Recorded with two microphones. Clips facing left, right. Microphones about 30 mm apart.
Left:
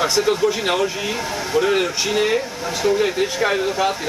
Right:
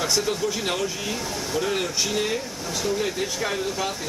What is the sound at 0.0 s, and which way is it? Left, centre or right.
Speech, left.